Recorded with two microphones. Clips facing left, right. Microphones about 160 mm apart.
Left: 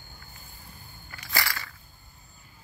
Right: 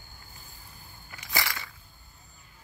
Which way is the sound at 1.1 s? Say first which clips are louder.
Left 1 dB; 20° right (ahead or behind).